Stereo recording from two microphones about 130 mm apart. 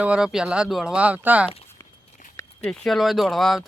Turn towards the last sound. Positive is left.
turn(degrees=0)  # may be behind; listen again after turning